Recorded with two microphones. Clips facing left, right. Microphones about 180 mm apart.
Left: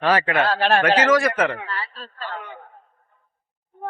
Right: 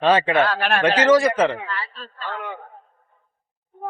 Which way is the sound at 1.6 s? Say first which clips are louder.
Right 1 dB; 40° left (ahead or behind).